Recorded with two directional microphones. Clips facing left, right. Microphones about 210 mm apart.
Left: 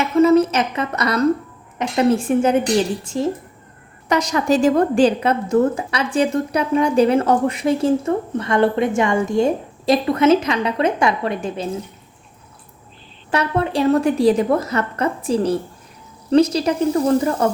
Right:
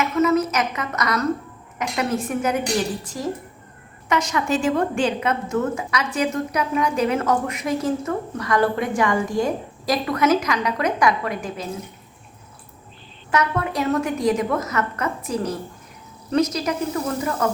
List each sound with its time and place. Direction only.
0.0 s a sound: 30° left (ahead or behind)
1.8 s a woman's voice: 30° left (ahead or behind)
4.1 s a woman's voice: 35° left (ahead or behind)
13.3 s a woman's voice: 30° left (ahead or behind)